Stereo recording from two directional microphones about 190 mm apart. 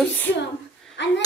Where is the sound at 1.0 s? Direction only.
70° left (ahead or behind).